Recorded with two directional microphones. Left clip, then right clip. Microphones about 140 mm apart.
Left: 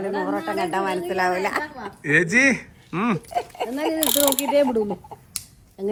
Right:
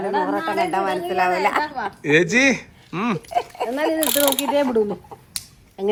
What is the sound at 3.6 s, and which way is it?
Ratchet, 5° right (ahead or behind).